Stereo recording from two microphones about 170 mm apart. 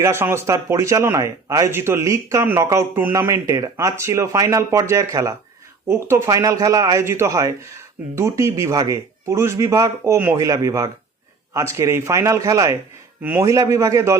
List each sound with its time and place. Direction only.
0.0 s speech: 15° right (ahead or behind)